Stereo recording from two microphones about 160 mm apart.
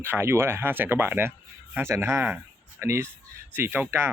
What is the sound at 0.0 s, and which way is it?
Speech, 15° right (ahead or behind).